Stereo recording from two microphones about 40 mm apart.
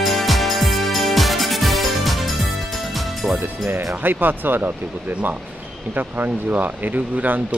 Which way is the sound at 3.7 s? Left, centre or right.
Right.